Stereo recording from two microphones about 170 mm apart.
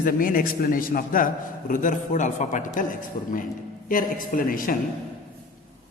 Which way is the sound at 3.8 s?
55° left (ahead or behind).